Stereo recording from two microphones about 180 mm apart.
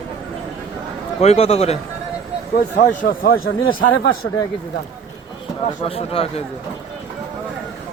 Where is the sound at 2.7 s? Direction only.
50° left (ahead or behind).